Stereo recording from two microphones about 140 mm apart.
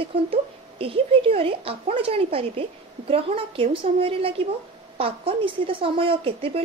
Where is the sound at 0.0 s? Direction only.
40° right (ahead or behind).